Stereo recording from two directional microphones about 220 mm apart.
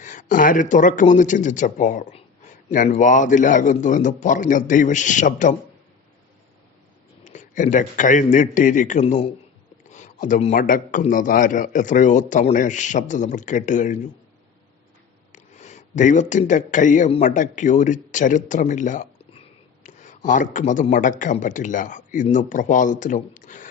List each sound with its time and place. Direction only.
0.0 s a man's voice: 35° left (ahead or behind)
7.3 s a man's voice: 35° left (ahead or behind)
15.3 s a man's voice: 30° left (ahead or behind)